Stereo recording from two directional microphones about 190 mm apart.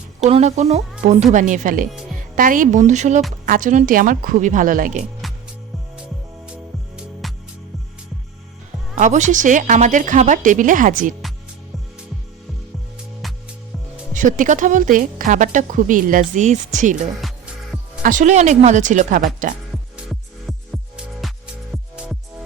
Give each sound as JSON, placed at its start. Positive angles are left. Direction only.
{"t": 0.3, "sound": "a woman's voice", "side_deg": -35}
{"t": 6.0, "sound": "music", "side_deg": -5}
{"t": 9.0, "sound": "a woman's voice", "side_deg": -40}
{"t": 13.2, "sound": "music", "side_deg": 0}
{"t": 14.1, "sound": "speech", "side_deg": -45}
{"t": 17.2, "sound": "music", "side_deg": 0}
{"t": 18.0, "sound": "a woman's voice", "side_deg": -40}
{"t": 20.0, "sound": "music", "side_deg": -5}